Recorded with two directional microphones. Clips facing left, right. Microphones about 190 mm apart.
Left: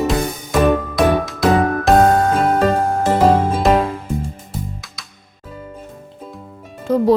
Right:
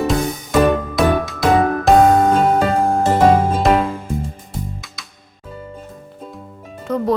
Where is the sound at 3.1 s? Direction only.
5° left (ahead or behind).